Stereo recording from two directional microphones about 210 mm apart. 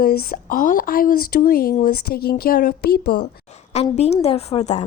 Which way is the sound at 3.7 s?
30° left (ahead or behind).